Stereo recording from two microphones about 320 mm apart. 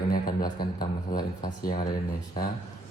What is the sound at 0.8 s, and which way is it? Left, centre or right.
Speech, centre.